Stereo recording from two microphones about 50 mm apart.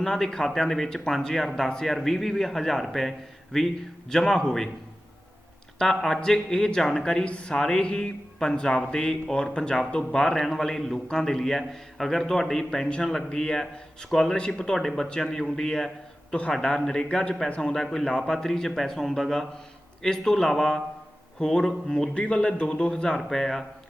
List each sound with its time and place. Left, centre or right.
0.0 s speech: centre
5.8 s speech: centre
16.3 s a man's voice: left